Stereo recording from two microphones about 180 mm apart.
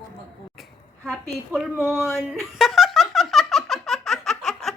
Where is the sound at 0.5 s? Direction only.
Centre (ahead or behind).